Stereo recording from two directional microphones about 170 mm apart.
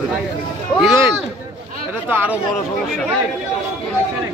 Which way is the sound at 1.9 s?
10° right (ahead or behind).